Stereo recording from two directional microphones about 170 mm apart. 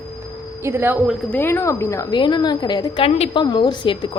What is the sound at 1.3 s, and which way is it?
A woman's voice, 15° left (ahead or behind).